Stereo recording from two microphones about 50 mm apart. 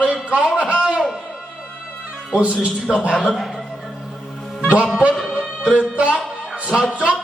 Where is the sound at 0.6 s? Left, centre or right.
Right.